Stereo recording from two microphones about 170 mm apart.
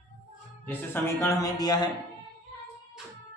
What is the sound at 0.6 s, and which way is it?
Speech, 15° left (ahead or behind).